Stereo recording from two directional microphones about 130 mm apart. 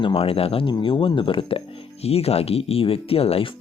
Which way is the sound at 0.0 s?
40° left (ahead or behind).